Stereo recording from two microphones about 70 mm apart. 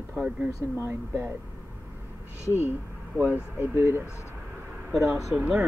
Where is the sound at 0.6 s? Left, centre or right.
Right.